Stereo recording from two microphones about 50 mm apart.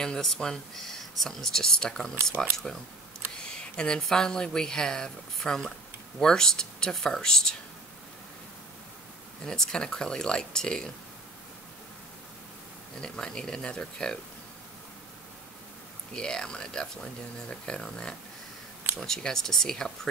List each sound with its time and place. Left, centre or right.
0.0 s speech: centre
9.5 s speech: centre
13.0 s speech: centre
16.1 s speech: centre